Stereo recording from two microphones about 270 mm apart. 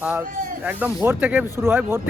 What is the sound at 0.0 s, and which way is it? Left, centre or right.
Speech, centre.